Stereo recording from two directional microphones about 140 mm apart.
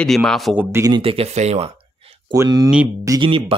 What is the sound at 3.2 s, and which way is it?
Speech, 40° right (ahead or behind).